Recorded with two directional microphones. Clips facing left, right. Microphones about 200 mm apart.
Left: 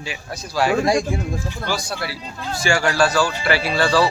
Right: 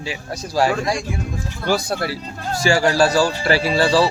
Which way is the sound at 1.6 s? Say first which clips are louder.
Right 8 dB; 50° right (ahead or behind).